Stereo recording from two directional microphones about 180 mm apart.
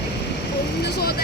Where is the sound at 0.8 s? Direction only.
60° left (ahead or behind).